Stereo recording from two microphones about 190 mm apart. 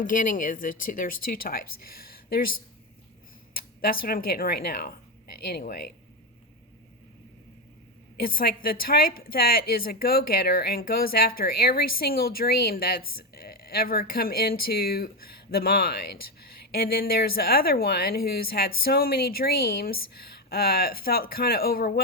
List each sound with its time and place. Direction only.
0.0 s a woman's voice: 45° left (ahead or behind)
3.6 s a woman's voice: 50° left (ahead or behind)
8.1 s a woman's voice: 50° left (ahead or behind)